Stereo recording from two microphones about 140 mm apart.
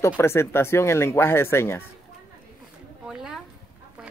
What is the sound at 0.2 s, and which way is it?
Speech, 15° left (ahead or behind).